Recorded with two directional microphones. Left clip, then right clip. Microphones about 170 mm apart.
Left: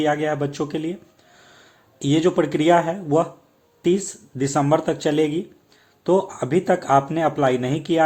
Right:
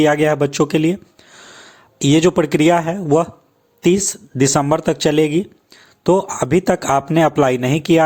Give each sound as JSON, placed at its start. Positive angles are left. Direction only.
{"t": 0.0, "sound": "speech", "side_deg": -35}